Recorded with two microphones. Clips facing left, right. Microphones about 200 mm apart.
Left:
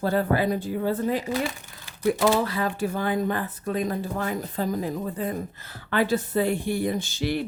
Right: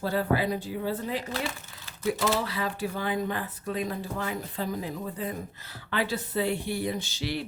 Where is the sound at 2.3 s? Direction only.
50° left (ahead or behind).